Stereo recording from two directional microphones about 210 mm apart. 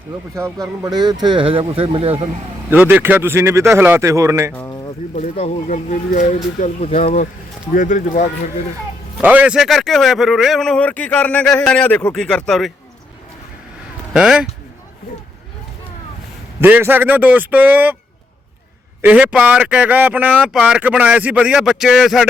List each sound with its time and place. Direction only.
0.8 s speech: 20° right (ahead or behind)
2.6 s a man's voice: 10° right (ahead or behind)
4.5 s a sound: 10° left (ahead or behind)
5.1 s speech: 30° left (ahead or behind)
9.2 s a man's voice: 5° right (ahead or behind)
14.1 s a man's voice: 5° right (ahead or behind)
16.6 s a man's voice: 10° right (ahead or behind)
19.0 s a man's voice: 5° right (ahead or behind)